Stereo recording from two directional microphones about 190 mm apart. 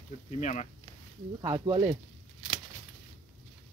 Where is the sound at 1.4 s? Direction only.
25° right (ahead or behind).